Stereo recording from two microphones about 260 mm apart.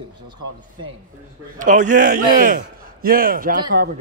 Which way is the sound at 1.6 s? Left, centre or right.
Right.